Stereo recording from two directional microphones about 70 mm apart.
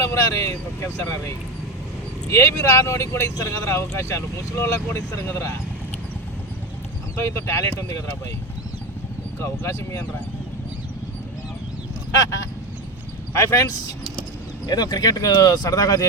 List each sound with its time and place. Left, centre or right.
0.0 s speech: left
7.2 s speech: left
9.4 s speech: left
12.1 s speech: left
14.7 s speech: left